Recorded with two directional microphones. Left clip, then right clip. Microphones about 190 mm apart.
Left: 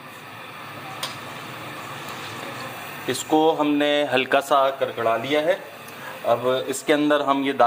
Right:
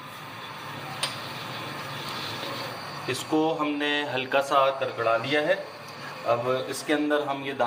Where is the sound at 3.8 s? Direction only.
60° left (ahead or behind).